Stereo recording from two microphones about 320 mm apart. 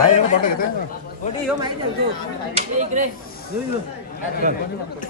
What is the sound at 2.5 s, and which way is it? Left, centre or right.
Speech, right.